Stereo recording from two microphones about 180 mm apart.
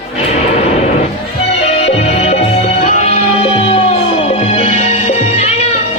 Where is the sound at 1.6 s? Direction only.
35° left (ahead or behind).